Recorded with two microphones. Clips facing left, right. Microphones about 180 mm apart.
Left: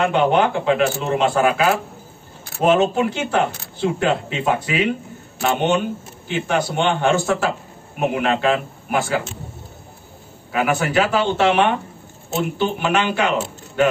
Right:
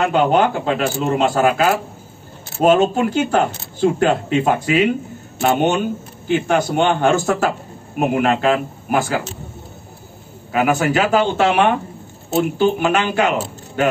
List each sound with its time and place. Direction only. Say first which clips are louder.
0.0 s speech: right 1 dB; 40° right (ahead or behind)
10.5 s speech: right 2 dB; 45° right (ahead or behind)